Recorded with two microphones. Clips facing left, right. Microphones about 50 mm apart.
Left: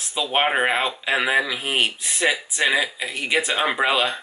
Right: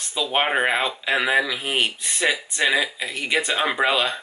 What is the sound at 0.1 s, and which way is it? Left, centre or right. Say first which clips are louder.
Speech: left 1 dB; centre.